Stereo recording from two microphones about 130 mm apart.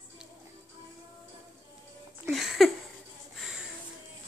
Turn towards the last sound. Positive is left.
turn(degrees=-5)  # may be behind; listen again after turning